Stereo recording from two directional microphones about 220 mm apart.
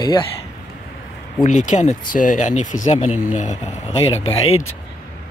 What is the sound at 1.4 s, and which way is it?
Speech, 35° left (ahead or behind).